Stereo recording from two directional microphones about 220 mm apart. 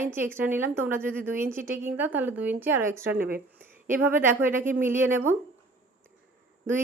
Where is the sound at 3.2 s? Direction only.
40° right (ahead or behind).